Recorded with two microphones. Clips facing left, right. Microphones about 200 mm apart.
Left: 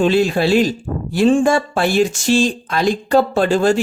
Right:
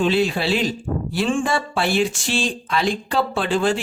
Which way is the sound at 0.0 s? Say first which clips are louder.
Left 5 dB; 45° left (ahead or behind).